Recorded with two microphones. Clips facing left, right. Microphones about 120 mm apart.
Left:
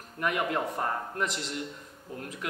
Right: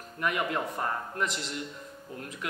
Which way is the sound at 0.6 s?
35° left (ahead or behind).